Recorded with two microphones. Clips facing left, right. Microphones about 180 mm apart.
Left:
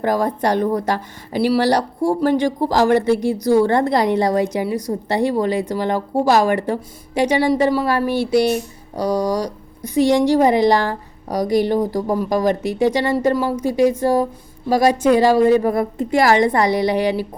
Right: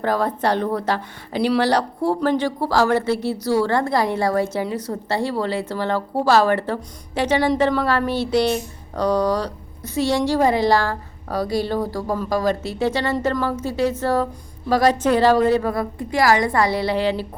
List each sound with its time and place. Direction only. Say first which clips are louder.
0.0 s a woman's voice: left 2 dB; 15° left (ahead or behind)